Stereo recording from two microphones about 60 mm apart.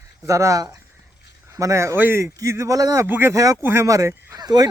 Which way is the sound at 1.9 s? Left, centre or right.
Right.